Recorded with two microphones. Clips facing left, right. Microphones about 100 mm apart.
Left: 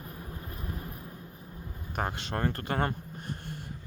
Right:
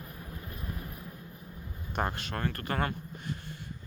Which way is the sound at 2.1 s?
30° left (ahead or behind).